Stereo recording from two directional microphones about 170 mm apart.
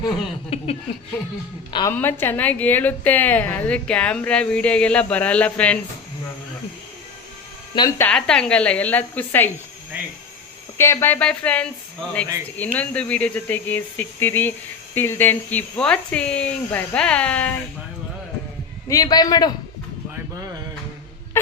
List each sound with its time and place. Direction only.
0.5 s a sound: 35° left (ahead or behind)
1.9 s a woman's voice: 10° left (ahead or behind)
7.8 s a woman's voice: 15° left (ahead or behind)
10.8 s a woman's voice: 15° left (ahead or behind)
18.9 s a man's voice: 20° left (ahead or behind)